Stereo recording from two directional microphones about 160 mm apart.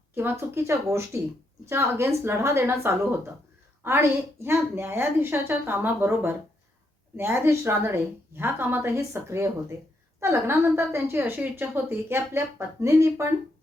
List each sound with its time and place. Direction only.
0.1 s a woman's voice: 15° right (ahead or behind)